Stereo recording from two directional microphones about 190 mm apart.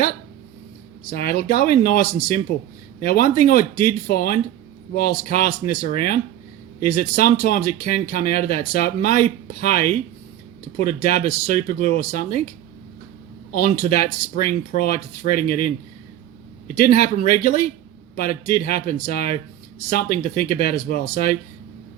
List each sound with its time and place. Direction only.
1.1 s speech: 50° left (ahead or behind)
13.5 s speech: 50° left (ahead or behind)
16.7 s speech: 50° left (ahead or behind)